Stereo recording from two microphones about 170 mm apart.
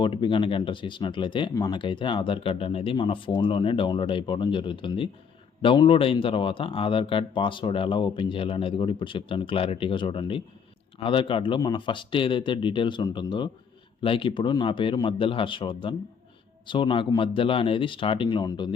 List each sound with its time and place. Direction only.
0.0 s speech: 30° left (ahead or behind)